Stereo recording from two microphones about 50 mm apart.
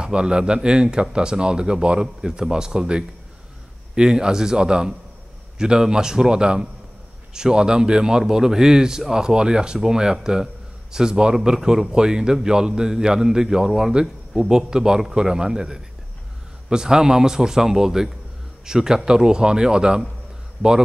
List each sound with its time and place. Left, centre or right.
0.0 s speech: centre